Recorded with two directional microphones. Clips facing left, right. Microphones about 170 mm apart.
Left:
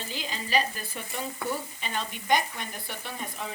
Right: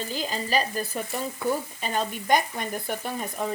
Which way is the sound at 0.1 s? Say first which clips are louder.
Right 1 dB; 40° right (ahead or behind).